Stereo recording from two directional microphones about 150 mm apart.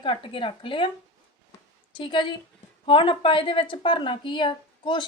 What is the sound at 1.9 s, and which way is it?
A woman's voice, 35° left (ahead or behind).